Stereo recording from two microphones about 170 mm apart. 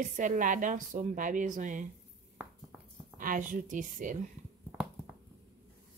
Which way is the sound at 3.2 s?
50° right (ahead or behind).